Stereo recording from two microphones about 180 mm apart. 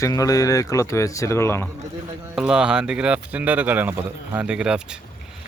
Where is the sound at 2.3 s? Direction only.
5° right (ahead or behind).